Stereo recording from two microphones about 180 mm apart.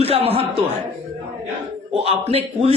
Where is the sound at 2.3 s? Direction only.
35° right (ahead or behind).